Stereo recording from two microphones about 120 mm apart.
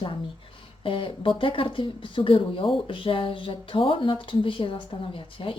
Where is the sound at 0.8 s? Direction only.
45° left (ahead or behind).